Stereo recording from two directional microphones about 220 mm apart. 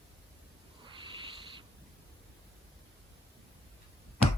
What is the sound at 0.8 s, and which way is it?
Owl, 20° right (ahead or behind).